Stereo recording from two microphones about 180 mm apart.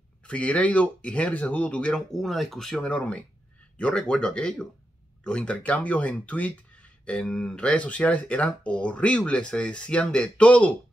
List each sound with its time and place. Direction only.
0.3 s speech: 5° left (ahead or behind)